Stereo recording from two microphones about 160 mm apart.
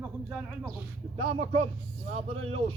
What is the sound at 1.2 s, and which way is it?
Speech, 40° right (ahead or behind).